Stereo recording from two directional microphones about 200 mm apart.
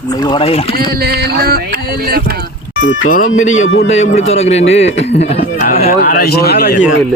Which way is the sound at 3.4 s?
80° left.